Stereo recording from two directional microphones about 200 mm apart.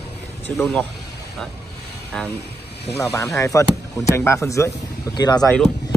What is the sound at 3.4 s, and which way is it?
Speech, 15° left (ahead or behind).